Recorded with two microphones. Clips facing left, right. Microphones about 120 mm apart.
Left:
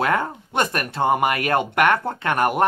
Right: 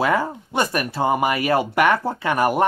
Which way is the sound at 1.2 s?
60° left (ahead or behind).